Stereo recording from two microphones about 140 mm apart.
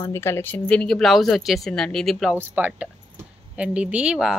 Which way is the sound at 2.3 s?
15° right (ahead or behind).